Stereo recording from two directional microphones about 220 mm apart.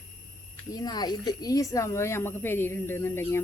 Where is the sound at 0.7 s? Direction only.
20° left (ahead or behind).